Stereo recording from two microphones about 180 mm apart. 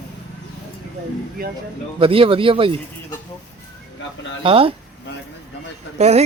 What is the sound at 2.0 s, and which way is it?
Speech, 30° right (ahead or behind).